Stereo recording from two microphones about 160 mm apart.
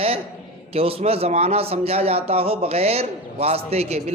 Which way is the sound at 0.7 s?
35° right (ahead or behind).